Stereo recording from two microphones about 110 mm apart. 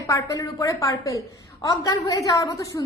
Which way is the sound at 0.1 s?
30° left (ahead or behind).